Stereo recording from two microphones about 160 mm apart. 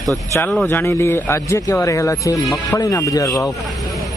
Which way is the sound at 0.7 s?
15° left (ahead or behind).